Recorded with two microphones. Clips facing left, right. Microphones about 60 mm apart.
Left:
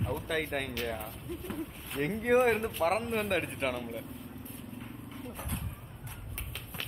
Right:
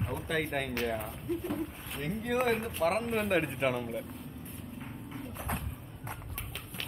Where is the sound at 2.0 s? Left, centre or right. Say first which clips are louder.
Left 5 dB; left.